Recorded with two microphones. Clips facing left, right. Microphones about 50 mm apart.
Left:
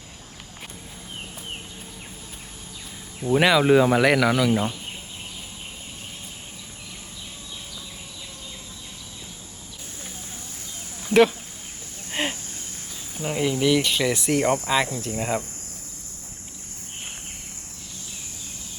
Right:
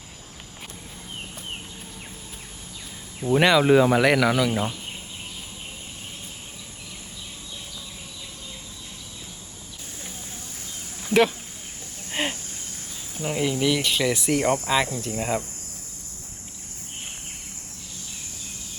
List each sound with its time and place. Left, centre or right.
3.2 s speech: centre
11.1 s a sound: centre
13.1 s speech: centre